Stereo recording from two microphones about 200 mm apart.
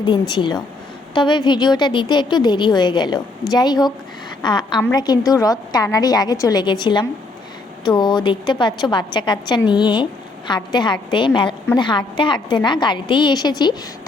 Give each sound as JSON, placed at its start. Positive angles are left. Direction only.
{"t": 0.0, "sound": "a woman's voice", "side_deg": 20}